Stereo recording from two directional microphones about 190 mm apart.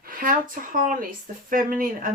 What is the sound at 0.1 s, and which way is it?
Speech, 45° right (ahead or behind).